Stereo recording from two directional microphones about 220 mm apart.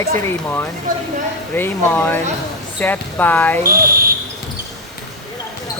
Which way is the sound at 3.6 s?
40° right (ahead or behind).